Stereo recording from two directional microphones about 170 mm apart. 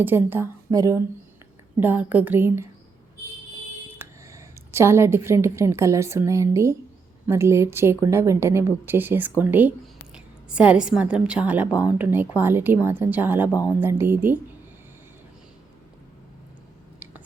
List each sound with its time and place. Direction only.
0.0 s a woman's voice: 10° right (ahead or behind)
3.9 s a woman's voice: 15° right (ahead or behind)